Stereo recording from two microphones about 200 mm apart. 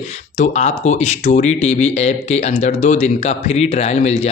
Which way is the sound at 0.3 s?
35° left (ahead or behind).